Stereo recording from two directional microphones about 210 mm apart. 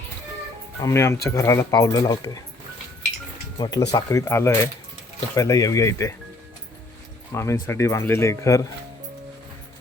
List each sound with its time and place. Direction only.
0.8 s speech: 15° left (ahead or behind)
3.6 s speech: 15° left (ahead or behind)
7.3 s speech: 15° left (ahead or behind)